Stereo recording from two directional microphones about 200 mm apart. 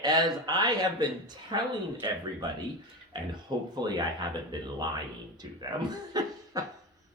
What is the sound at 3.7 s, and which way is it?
Speech, 20° right (ahead or behind).